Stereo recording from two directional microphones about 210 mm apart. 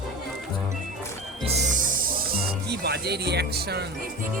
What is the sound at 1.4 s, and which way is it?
Music, 40° right (ahead or behind).